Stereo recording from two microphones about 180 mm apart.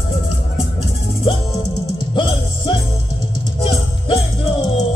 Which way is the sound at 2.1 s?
25° left (ahead or behind).